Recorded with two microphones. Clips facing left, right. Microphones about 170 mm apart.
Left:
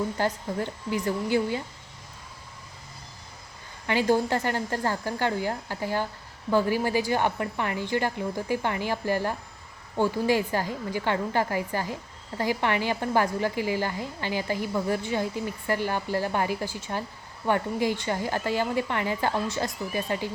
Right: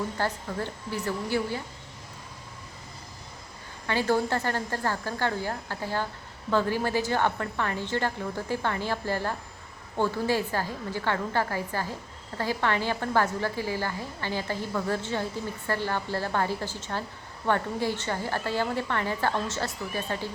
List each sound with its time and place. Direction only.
0.2 s a woman's voice: 15° left (ahead or behind)
3.8 s a woman's voice: 15° left (ahead or behind)